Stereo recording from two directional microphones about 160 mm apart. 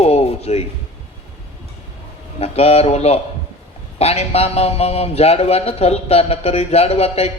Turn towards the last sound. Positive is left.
turn(degrees=40)  # may be behind; listen again after turning